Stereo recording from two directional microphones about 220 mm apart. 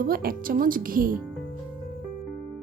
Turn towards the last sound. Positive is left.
turn(degrees=-40)  # may be behind; listen again after turning